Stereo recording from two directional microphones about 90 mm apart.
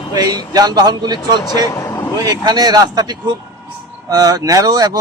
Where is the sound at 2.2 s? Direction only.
45° right (ahead or behind).